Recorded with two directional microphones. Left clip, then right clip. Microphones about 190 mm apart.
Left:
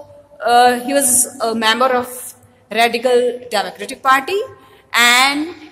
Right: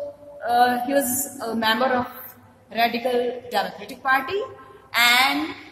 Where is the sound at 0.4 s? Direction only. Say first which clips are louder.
Left 8 dB; 45° left (ahead or behind).